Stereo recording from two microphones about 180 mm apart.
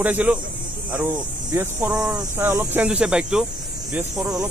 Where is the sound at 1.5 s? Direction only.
10° right (ahead or behind).